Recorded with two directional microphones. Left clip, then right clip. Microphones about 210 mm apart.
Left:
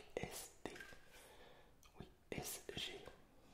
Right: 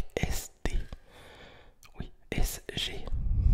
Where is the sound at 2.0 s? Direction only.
45° right (ahead or behind).